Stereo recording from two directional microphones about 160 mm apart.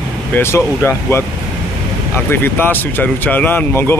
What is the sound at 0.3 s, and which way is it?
Speech, 15° left (ahead or behind).